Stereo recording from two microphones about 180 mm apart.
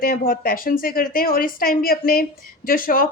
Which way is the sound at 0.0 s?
55° left (ahead or behind).